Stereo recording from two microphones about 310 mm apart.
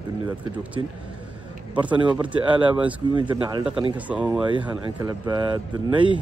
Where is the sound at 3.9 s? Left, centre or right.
Centre.